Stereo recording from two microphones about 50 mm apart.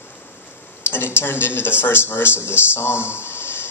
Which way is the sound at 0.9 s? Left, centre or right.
Left.